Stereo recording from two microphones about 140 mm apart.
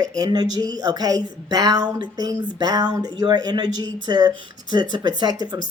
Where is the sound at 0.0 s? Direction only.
30° right (ahead or behind).